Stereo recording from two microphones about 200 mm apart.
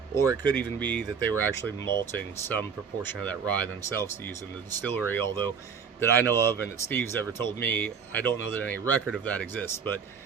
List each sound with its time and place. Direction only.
0.1 s speech: 10° left (ahead or behind)
4.9 s speech: 10° left (ahead or behind)
8.8 s speech: 10° right (ahead or behind)
9.1 s speech: 5° left (ahead or behind)